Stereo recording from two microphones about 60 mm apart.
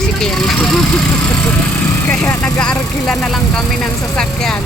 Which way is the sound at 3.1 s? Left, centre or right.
Centre.